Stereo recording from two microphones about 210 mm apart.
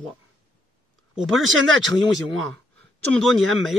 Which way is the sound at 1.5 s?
65° right (ahead or behind).